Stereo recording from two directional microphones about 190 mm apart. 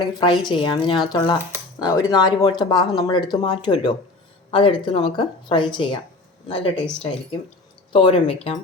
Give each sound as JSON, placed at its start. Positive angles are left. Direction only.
{"t": 0.2, "sound": "speech", "side_deg": 25}
{"t": 6.8, "sound": "speech", "side_deg": 5}
{"t": 7.9, "sound": "speech", "side_deg": 25}